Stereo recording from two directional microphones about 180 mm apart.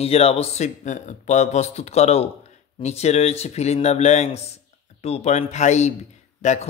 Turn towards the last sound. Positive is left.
turn(degrees=40)  # may be behind; listen again after turning